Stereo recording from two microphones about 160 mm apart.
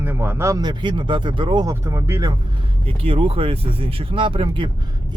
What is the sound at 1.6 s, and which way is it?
Speech, 20° right (ahead or behind).